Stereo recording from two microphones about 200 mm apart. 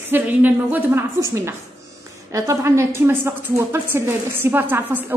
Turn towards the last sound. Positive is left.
turn(degrees=-10)  # may be behind; listen again after turning